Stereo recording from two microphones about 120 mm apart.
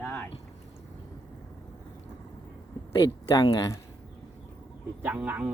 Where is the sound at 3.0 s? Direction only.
30° left (ahead or behind).